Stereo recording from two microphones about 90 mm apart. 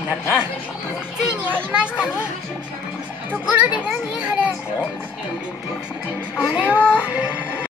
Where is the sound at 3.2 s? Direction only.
15° right (ahead or behind).